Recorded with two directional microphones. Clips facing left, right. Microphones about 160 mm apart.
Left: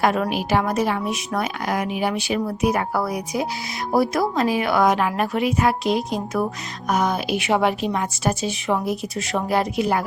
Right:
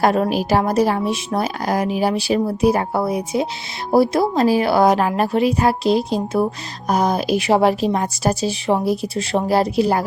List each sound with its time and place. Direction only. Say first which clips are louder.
0.0 s a woman's voice: right 4 dB; 35° right (ahead or behind)